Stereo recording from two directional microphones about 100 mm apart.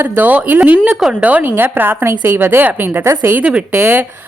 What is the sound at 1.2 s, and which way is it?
A woman's voice, 15° right (ahead or behind).